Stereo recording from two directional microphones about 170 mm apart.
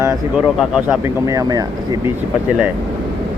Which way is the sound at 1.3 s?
20° right (ahead or behind).